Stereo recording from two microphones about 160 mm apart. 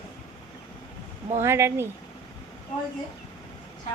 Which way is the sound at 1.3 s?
15° right (ahead or behind).